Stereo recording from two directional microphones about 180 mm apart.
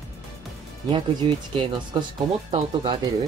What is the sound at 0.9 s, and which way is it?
Speech, 25° right (ahead or behind).